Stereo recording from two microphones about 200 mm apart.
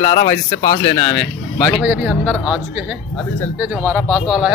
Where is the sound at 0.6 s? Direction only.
35° left (ahead or behind).